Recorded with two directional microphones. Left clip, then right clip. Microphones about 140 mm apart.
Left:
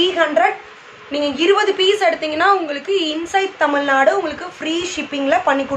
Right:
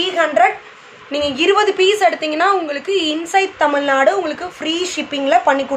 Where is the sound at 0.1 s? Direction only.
40° right (ahead or behind).